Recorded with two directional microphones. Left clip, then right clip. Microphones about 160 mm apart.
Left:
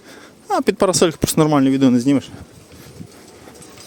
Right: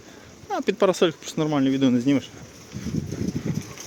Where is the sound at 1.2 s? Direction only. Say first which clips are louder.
Left 11 dB; 85° left.